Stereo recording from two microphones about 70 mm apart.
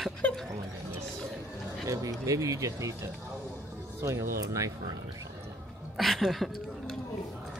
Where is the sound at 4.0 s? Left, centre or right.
Right.